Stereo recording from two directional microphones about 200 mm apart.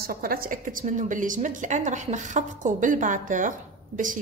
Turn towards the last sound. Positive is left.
turn(degrees=-40)  # may be behind; listen again after turning